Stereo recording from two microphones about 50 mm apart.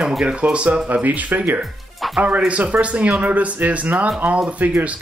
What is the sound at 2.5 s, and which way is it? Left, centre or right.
Speech, right.